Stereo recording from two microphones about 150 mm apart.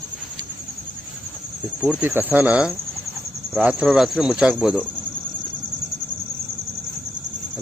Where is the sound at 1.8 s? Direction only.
10° right (ahead or behind).